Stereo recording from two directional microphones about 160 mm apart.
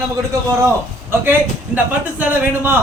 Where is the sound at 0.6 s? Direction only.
15° right (ahead or behind).